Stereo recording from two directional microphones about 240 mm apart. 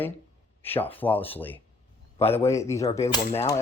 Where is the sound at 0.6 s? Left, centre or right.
Centre.